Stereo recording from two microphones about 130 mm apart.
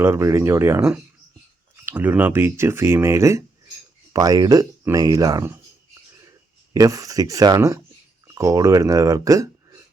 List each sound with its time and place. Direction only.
0.0 s speech: 20° right (ahead or behind)
6.7 s speech: 25° right (ahead or behind)